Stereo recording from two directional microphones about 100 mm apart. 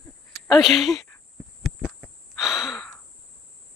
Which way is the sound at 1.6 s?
Centre (ahead or behind).